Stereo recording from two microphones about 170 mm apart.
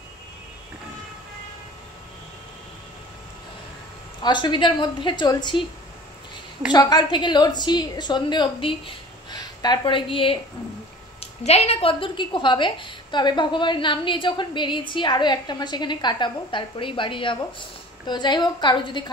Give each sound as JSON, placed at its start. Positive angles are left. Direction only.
{"t": 4.2, "sound": "a woman's voice", "side_deg": 25}
{"t": 6.7, "sound": "a woman's voice", "side_deg": 25}